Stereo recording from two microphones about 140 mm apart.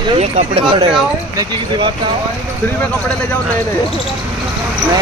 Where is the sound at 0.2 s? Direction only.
50° right (ahead or behind).